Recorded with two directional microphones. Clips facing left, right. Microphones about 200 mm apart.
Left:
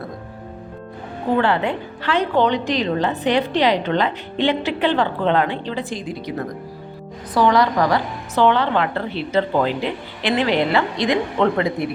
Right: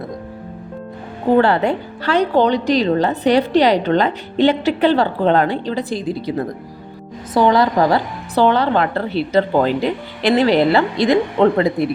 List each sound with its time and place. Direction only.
1.4 s a woman's voice: 40° right (ahead or behind)